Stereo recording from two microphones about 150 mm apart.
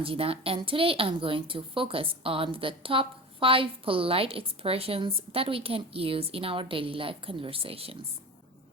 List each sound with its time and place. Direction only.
0.0 s a woman's voice: 40° right (ahead or behind)